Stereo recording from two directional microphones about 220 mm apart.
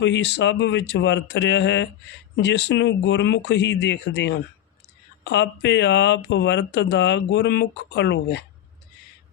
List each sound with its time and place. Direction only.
0.0 s speech: 55° left (ahead or behind)